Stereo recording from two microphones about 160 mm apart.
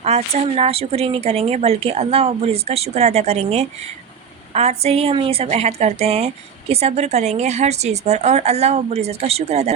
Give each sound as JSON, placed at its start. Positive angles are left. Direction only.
{"t": 0.0, "sound": "a woman's voice", "side_deg": -40}